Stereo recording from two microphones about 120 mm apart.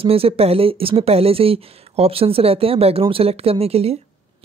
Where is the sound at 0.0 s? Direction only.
55° right (ahead or behind).